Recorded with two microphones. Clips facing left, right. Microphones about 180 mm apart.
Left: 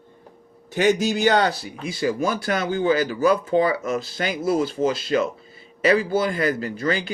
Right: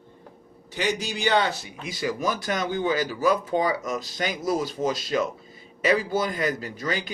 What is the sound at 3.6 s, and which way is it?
Speech, 60° left (ahead or behind).